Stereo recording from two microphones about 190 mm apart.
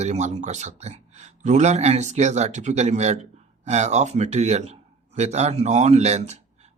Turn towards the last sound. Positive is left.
turn(degrees=-35)  # may be behind; listen again after turning